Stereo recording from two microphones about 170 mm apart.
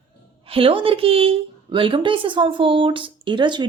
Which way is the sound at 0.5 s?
30° right (ahead or behind).